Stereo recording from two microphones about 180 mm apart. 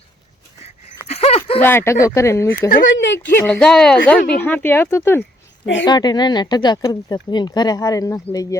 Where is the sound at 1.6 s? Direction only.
15° left (ahead or behind).